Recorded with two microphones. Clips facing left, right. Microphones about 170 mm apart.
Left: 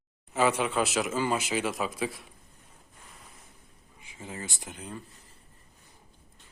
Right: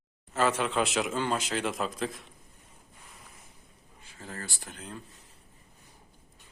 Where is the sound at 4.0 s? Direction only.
15° left (ahead or behind).